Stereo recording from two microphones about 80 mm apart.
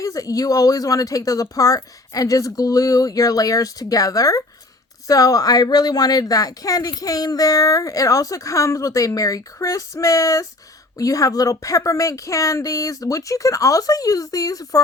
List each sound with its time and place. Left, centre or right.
0.0 s speech: left